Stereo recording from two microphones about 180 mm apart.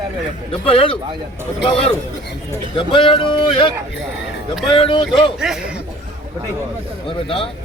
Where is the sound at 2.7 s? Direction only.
30° left (ahead or behind).